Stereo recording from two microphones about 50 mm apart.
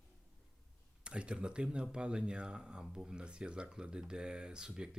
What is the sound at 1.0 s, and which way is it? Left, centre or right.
Speech, right.